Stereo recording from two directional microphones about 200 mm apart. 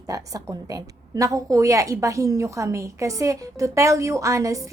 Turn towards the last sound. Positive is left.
turn(degrees=-15)  # may be behind; listen again after turning